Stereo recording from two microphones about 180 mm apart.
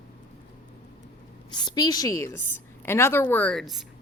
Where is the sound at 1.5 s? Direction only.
25° left (ahead or behind).